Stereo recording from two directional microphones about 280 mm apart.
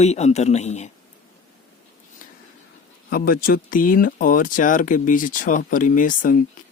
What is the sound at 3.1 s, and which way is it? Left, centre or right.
Speech, left.